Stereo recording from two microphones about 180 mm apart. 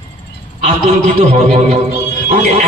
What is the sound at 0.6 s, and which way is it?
A man's voice, 35° right (ahead or behind).